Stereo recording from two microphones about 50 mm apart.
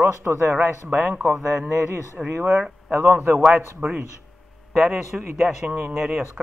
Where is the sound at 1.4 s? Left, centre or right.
Right.